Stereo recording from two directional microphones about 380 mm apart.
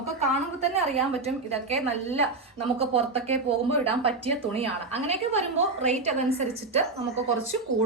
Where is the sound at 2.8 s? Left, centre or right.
Centre.